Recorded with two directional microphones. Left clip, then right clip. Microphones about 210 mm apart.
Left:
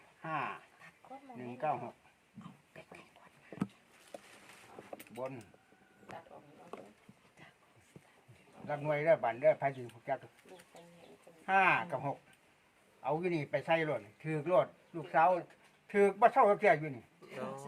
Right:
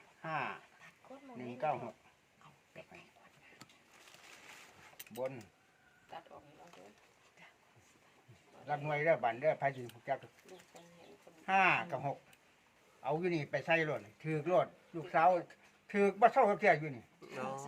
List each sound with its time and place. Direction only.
0.2 s dog: 5° right (ahead or behind)
1.4 s speech: 10° right (ahead or behind)
5.1 s speech: 10° right (ahead or behind)
8.6 s speech: 10° right (ahead or behind)
11.4 s speech: 5° right (ahead or behind)
17.2 s a sound: 35° right (ahead or behind)